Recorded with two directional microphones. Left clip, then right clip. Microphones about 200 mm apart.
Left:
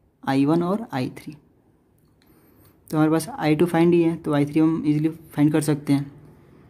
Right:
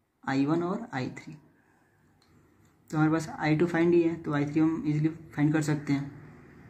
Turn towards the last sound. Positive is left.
turn(degrees=45)  # may be behind; listen again after turning